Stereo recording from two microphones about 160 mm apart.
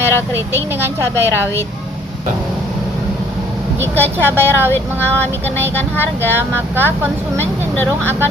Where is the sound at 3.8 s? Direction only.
15° right (ahead or behind).